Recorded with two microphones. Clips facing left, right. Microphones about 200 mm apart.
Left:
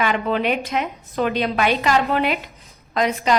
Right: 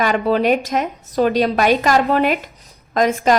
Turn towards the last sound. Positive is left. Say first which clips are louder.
# right 4 dB
turn(degrees=-45)  # may be behind; listen again after turning